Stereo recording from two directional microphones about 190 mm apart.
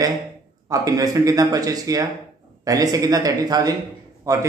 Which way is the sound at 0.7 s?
20° right (ahead or behind).